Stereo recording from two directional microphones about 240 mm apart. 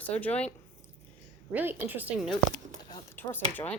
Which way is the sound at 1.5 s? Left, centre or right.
Centre.